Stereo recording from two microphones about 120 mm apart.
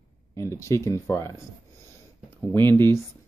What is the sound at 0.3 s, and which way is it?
Speech, 25° left (ahead or behind).